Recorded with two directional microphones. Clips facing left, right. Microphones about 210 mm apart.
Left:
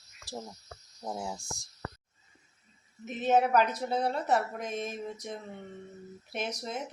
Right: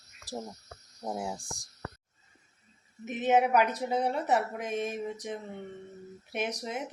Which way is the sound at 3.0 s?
15° right (ahead or behind).